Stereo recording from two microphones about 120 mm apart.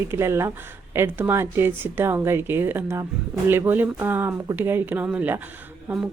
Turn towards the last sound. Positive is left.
turn(degrees=-15)  # may be behind; listen again after turning